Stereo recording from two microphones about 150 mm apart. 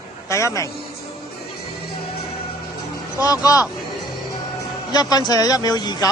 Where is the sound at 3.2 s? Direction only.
25° left (ahead or behind).